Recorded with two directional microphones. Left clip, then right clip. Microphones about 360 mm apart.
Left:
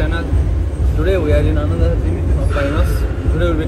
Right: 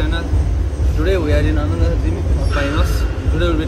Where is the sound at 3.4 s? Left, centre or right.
Centre.